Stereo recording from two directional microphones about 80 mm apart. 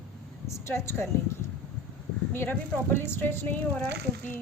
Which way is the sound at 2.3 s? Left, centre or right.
Left.